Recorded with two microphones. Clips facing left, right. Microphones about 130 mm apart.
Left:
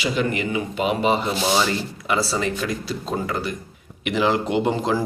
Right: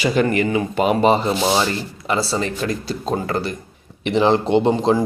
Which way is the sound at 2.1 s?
30° right (ahead or behind).